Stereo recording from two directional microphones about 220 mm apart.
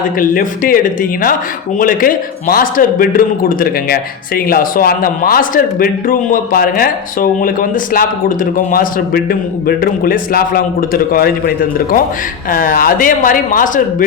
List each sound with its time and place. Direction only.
0.0 s a man's voice: 40° left (ahead or behind)
1.8 s a man's voice: 40° left (ahead or behind)